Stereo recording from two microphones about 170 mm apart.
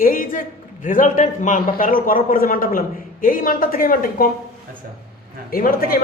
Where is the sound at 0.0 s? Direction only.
55° left (ahead or behind).